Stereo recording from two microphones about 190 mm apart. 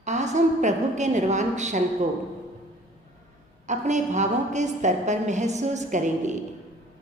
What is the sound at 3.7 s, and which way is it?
A woman's voice, 40° right (ahead or behind).